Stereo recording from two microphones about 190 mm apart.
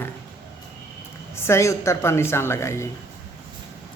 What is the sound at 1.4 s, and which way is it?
Speech, 15° left (ahead or behind).